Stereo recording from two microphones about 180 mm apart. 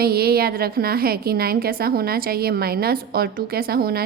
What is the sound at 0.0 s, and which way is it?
A woman's voice, 60° right (ahead or behind).